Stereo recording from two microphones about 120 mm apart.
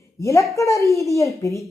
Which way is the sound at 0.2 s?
25° left (ahead or behind).